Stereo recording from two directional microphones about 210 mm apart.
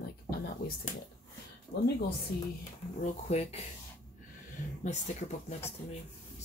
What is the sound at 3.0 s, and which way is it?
Speech, 30° left (ahead or behind).